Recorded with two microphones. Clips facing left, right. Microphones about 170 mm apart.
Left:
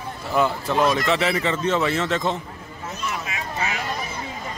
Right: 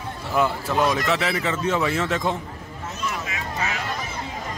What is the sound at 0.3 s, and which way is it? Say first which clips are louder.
Speech: left 1 dB; 5° right (ahead or behind).